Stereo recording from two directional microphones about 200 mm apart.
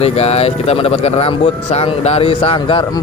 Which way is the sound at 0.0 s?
30° left (ahead or behind).